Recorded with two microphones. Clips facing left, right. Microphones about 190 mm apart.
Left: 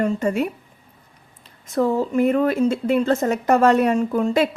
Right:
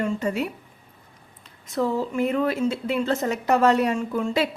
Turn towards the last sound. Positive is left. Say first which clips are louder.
# left 5 dB
turn(degrees=40)  # may be behind; listen again after turning